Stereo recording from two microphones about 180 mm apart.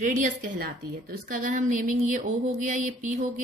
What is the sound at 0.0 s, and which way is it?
A woman's voice, 45° right (ahead or behind).